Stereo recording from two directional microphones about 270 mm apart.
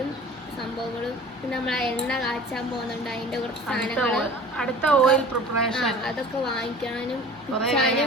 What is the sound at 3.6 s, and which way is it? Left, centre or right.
A woman's voice, centre.